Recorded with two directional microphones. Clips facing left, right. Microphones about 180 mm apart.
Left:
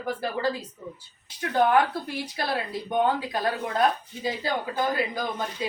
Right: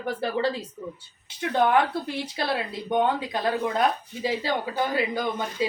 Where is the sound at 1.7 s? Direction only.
25° right (ahead or behind).